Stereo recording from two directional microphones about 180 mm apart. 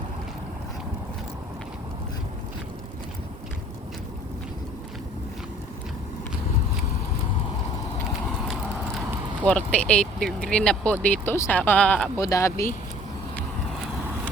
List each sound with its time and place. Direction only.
9.5 s speech: 5° left (ahead or behind)
12.1 s speech: 15° left (ahead or behind)